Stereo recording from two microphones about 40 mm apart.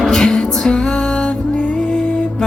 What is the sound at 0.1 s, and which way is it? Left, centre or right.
Music, centre.